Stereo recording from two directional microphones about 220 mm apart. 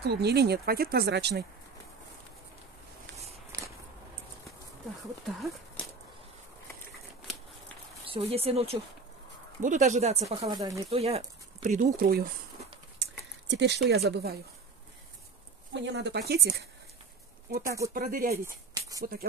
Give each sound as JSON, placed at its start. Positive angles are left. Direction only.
{"t": 0.0, "sound": "speech", "side_deg": -50}
{"t": 5.2, "sound": "speech", "side_deg": 0}
{"t": 8.1, "sound": "speech", "side_deg": -25}
{"t": 11.0, "sound": "speech", "side_deg": -30}
{"t": 13.5, "sound": "speech", "side_deg": -50}
{"t": 15.7, "sound": "speech", "side_deg": -55}
{"t": 17.6, "sound": "speech", "side_deg": -15}
{"t": 17.9, "sound": "speech", "side_deg": -40}
{"t": 18.4, "sound": "a sound", "side_deg": -15}